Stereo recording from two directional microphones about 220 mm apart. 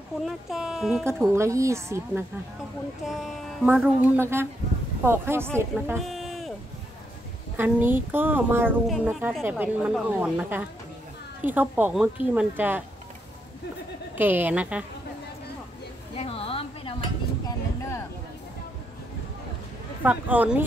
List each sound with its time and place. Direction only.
0.2 s speech: centre (ahead or behind)
1.0 s a woman's voice: 10° right (ahead or behind)
3.1 s a woman's voice: centre (ahead or behind)
5.9 s a sound: centre (ahead or behind)
7.5 s a woman's voice: 10° right (ahead or behind)
14.1 s a woman's voice: 10° right (ahead or behind)
16.2 s a sound: 25° left (ahead or behind)
17.5 s a sound: 15° left (ahead or behind)
20.0 s a woman's voice: 5° right (ahead or behind)